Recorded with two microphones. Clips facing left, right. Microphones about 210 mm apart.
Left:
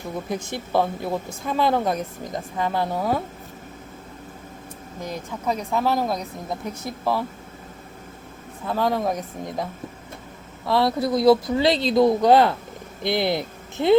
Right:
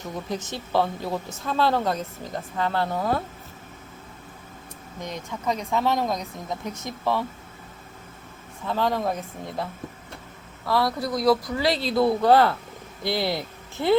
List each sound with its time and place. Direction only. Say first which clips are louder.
0.3 s speech: left 2 dB; 10° left (ahead or behind)
5.0 s speech: left 1 dB; 5° left (ahead or behind)
8.6 s speech: left 2 dB; 10° left (ahead or behind)
10.7 s speech: left 4 dB; 25° left (ahead or behind)